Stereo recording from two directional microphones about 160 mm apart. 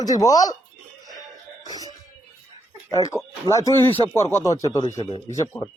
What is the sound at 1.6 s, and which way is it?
Throat clearing, 25° left (ahead or behind).